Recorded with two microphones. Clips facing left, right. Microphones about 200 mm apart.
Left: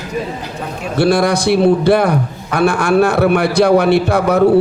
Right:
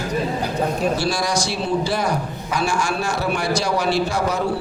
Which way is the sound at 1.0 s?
60° left (ahead or behind).